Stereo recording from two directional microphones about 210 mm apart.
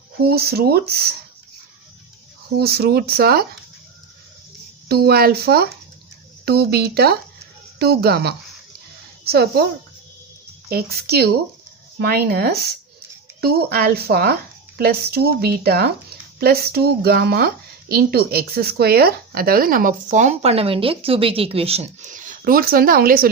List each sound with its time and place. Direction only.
0.2 s speech: 50° right (ahead or behind)
2.6 s speech: 50° right (ahead or behind)
4.9 s speech: 50° right (ahead or behind)
10.7 s speech: 45° right (ahead or behind)